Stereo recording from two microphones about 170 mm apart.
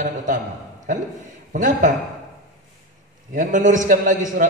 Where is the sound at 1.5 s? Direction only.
50° right (ahead or behind).